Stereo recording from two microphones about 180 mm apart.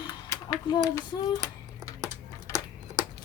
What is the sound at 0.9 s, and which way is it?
Child singing, 20° left (ahead or behind).